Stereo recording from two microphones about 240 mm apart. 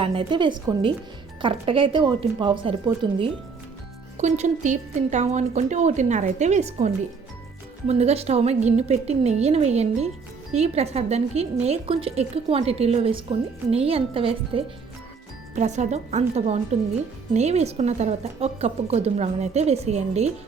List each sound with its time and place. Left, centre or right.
0.0 s a woman's voice: right